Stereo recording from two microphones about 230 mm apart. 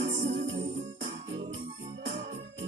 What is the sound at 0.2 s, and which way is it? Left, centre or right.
Music, right.